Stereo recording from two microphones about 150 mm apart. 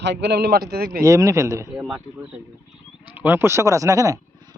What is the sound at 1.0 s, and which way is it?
Speech, 20° right (ahead or behind).